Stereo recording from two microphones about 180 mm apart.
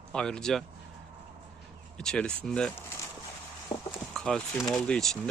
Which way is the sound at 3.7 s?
25° left (ahead or behind).